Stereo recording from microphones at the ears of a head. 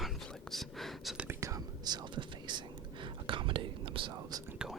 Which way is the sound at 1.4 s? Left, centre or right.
Right.